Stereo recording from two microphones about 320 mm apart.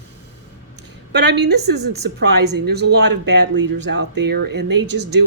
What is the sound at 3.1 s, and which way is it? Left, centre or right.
Speech, right.